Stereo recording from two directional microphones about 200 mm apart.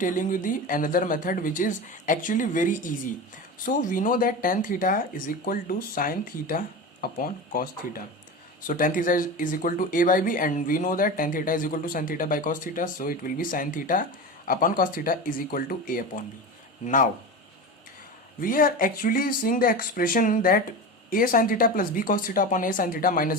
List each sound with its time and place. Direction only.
0.0 s speech: 40° left (ahead or behind)
18.3 s speech: 45° left (ahead or behind)